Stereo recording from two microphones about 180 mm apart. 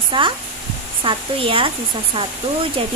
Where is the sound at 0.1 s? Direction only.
30° right (ahead or behind).